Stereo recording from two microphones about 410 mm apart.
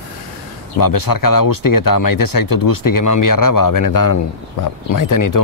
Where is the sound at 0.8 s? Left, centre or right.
Left.